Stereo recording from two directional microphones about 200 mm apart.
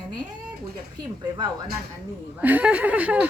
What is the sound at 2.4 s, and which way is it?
Speech, 10° right (ahead or behind).